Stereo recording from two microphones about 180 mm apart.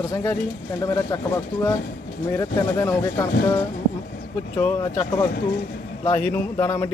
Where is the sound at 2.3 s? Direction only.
15° left (ahead or behind).